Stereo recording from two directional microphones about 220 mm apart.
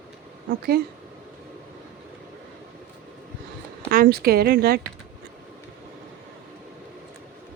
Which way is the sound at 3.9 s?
40° right (ahead or behind).